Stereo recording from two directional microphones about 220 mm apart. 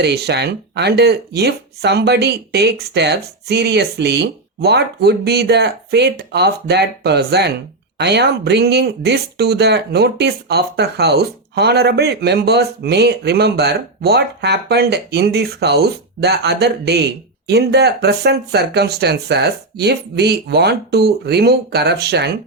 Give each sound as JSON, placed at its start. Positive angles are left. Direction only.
{"t": 0.0, "sound": "speech", "side_deg": -50}